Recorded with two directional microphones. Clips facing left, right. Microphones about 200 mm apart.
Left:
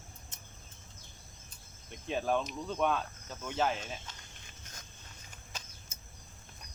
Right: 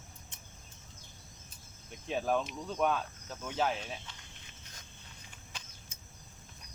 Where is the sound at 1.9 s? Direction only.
Centre (ahead or behind).